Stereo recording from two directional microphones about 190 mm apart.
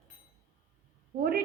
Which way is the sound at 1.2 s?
55° right (ahead or behind).